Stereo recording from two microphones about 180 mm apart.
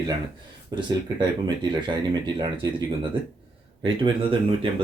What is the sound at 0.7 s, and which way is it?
Speech, 25° right (ahead or behind).